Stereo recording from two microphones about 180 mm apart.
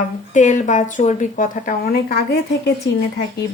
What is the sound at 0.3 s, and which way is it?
A woman's voice, 45° left (ahead or behind).